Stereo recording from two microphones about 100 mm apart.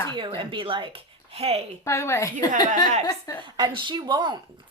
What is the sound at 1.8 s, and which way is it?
Speech, 30° left (ahead or behind).